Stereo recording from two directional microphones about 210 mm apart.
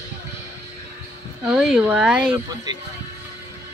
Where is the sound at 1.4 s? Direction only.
5° right (ahead or behind).